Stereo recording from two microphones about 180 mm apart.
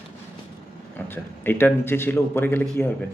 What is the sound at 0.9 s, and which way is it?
A man's voice, 10° left (ahead or behind).